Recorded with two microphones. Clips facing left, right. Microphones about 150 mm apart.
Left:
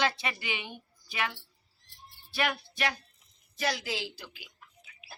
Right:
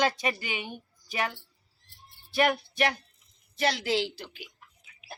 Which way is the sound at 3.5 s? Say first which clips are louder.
Right 5 dB; 65° right (ahead or behind).